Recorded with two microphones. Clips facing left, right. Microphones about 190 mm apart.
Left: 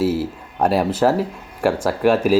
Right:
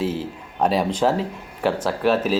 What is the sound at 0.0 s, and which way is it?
Speech, 10° left (ahead or behind).